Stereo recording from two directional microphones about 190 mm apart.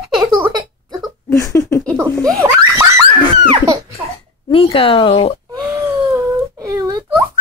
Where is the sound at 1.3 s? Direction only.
15° left (ahead or behind).